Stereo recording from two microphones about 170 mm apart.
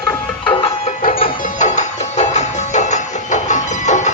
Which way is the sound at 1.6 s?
45° left (ahead or behind).